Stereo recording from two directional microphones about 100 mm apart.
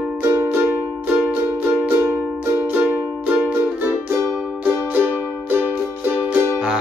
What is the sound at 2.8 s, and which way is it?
Music, 15° right (ahead or behind).